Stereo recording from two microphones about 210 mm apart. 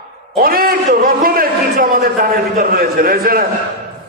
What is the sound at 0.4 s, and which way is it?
A man's voice, 45° right (ahead or behind).